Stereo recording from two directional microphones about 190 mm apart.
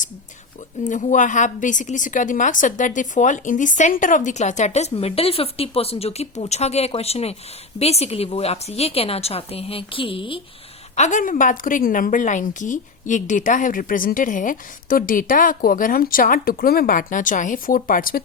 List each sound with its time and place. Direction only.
0.9 s a woman's voice: 40° left (ahead or behind)
10.9 s a woman's voice: 40° left (ahead or behind)